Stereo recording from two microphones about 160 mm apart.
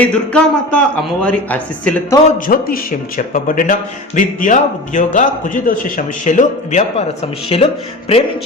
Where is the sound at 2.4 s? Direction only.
60° left (ahead or behind).